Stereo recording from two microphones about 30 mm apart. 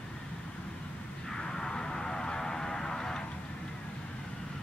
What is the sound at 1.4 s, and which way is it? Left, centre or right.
Vehicle, left.